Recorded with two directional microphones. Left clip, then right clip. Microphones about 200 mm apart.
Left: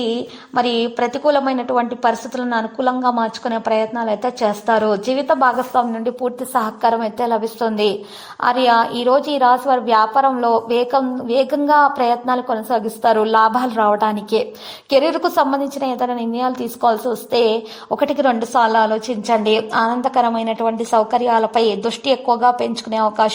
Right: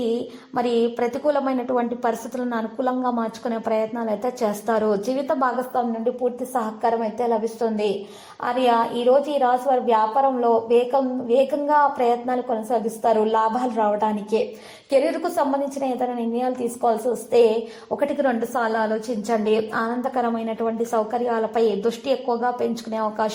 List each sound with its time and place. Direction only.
0.5 s a woman's voice: 25° left (ahead or behind)
7.3 s a woman's voice: 40° left (ahead or behind); by 14.4 s 60° left (ahead or behind)
14.8 s a woman's voice: 40° left (ahead or behind)
17.9 s a woman's voice: 35° left (ahead or behind)